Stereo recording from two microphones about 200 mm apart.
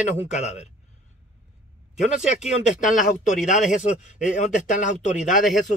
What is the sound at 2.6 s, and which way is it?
Speech, 40° left (ahead or behind).